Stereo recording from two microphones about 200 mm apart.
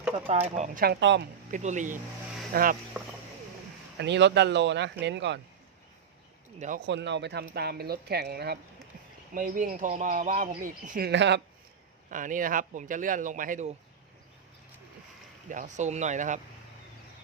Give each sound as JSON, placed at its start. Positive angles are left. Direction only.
{"t": 0.5, "sound": "speech", "side_deg": -40}
{"t": 1.5, "sound": "speech", "side_deg": -40}
{"t": 3.9, "sound": "speech", "side_deg": -60}
{"t": 6.6, "sound": "speech", "side_deg": -40}
{"t": 6.8, "sound": "speech", "side_deg": -60}
{"t": 9.3, "sound": "speech", "side_deg": -40}
{"t": 11.1, "sound": "speech", "side_deg": -60}
{"t": 12.1, "sound": "speech", "side_deg": -40}
{"t": 15.4, "sound": "speech", "side_deg": -40}